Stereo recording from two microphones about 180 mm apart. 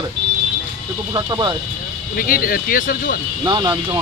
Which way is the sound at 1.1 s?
25° right (ahead or behind).